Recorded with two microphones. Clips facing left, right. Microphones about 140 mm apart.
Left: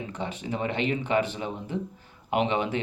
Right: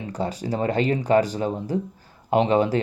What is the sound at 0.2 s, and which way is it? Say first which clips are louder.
Speech: right 6 dB; 35° right (ahead or behind).